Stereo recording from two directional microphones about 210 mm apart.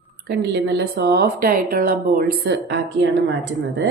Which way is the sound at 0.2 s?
50° right (ahead or behind).